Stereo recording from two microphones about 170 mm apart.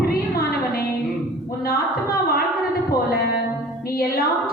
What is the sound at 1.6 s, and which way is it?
Speech, 65° left (ahead or behind).